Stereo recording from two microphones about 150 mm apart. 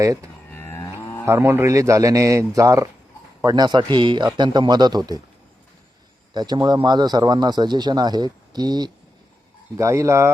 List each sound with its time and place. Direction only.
0.0 s speech: 20° right (ahead or behind)
0.5 s livestock: 15° left (ahead or behind)
1.2 s speech: 15° right (ahead or behind)
6.3 s speech: 30° right (ahead or behind)